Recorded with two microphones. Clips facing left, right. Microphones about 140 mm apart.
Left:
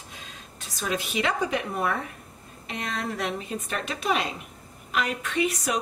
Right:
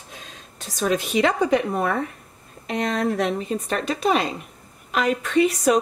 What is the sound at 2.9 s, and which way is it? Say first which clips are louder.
A woman's voice: right 6 dB; 40° right (ahead or behind).